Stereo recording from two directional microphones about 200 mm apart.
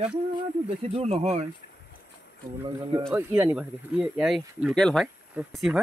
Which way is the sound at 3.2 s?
10° right (ahead or behind).